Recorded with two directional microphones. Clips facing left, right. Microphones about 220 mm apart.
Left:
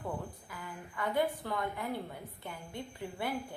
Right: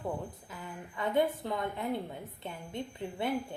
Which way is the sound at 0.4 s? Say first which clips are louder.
Right 2 dB; 25° right (ahead or behind).